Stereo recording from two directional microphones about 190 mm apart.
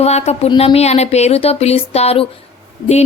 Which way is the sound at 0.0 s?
35° left (ahead or behind).